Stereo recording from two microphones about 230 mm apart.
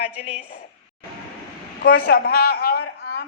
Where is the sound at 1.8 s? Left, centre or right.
Left.